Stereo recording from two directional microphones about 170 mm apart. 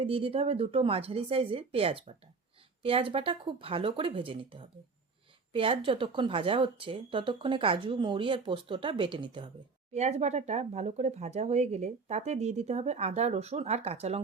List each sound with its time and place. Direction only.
0.0 s speech: 35° right (ahead or behind)
9.9 s speech: 40° right (ahead or behind)